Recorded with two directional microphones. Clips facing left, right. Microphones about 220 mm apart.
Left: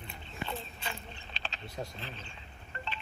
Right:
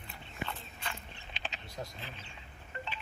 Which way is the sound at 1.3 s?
15° right (ahead or behind).